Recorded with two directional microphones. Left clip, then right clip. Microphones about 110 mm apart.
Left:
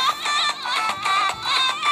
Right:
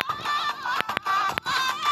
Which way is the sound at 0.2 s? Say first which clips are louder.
Left 5 dB; 35° left (ahead or behind).